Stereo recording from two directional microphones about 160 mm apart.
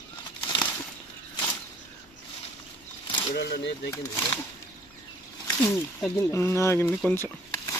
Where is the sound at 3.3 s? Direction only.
90° left.